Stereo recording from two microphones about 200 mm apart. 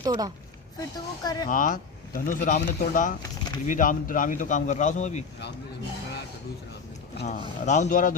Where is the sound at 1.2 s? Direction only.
20° left (ahead or behind).